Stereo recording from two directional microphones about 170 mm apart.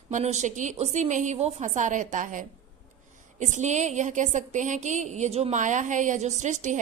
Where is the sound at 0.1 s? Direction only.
45° right (ahead or behind).